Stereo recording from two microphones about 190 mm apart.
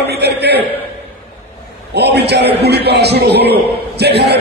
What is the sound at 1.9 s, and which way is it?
A man's voice, 60° right (ahead or behind).